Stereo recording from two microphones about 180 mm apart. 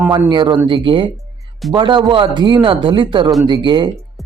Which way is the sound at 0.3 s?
25° right (ahead or behind).